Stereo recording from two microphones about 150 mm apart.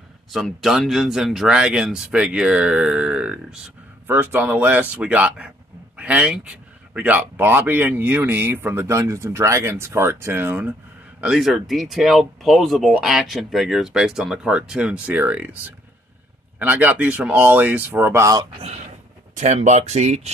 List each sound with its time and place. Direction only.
0.3 s speech: centre (ahead or behind)
16.5 s speech: 10° right (ahead or behind)
19.3 s speech: 50° right (ahead or behind)